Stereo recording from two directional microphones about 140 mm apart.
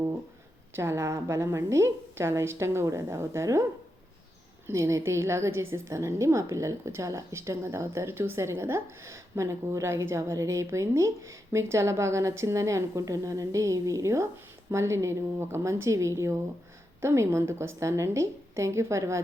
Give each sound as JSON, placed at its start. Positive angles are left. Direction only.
{"t": 0.8, "sound": "a woman's voice", "side_deg": -20}
{"t": 4.6, "sound": "a woman's voice", "side_deg": -20}